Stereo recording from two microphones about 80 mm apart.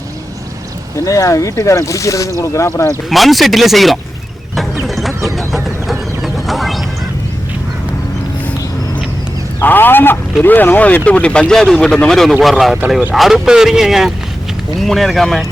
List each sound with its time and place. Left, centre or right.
0.9 s speech: left
3.1 s speech: centre
5.6 s music: centre
9.6 s speech: left; by 15.4 s centre